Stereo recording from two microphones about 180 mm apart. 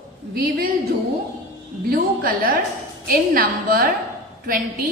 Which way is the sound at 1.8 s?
55° right (ahead or behind).